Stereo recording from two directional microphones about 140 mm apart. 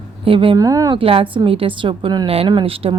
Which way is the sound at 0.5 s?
25° right (ahead or behind).